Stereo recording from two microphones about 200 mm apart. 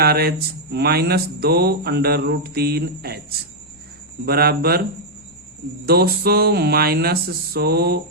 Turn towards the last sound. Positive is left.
turn(degrees=-50)  # may be behind; listen again after turning